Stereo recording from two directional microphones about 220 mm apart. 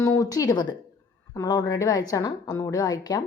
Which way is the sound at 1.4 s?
15° left (ahead or behind).